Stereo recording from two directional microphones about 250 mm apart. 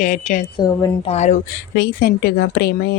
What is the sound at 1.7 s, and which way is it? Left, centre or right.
Speech, left.